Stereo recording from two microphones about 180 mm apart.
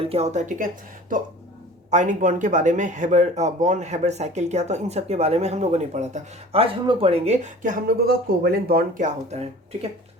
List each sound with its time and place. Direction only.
0.0 s speech: 35° right (ahead or behind)
1.9 s speech: 45° right (ahead or behind)